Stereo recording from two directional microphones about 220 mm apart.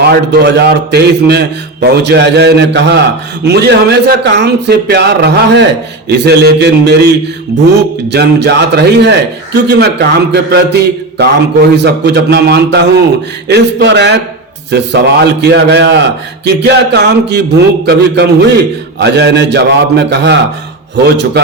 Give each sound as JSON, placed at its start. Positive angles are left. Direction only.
{"t": 0.1, "sound": "a man's voice", "side_deg": -50}
{"t": 8.1, "sound": "a man's voice", "side_deg": -50}